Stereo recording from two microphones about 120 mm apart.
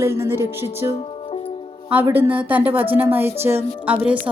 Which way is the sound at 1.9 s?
15° right (ahead or behind).